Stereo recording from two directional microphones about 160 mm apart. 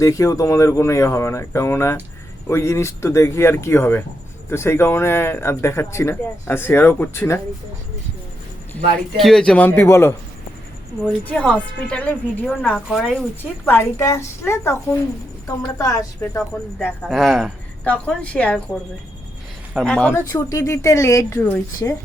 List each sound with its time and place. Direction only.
0.0 s speech: 20° left (ahead or behind)
9.1 s speech: centre (ahead or behind)
11.3 s speech: 10° left (ahead or behind)
13.4 s speech: 10° left (ahead or behind)
16.7 s speech: 5° left (ahead or behind)
20.3 s speech: 20° left (ahead or behind)